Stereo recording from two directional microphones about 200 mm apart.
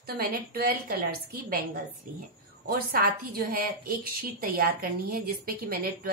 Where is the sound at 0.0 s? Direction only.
45° right (ahead or behind).